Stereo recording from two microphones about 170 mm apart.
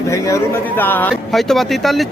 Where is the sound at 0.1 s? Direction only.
15° left (ahead or behind).